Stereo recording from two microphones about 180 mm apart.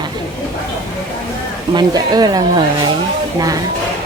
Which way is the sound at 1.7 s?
20° right (ahead or behind).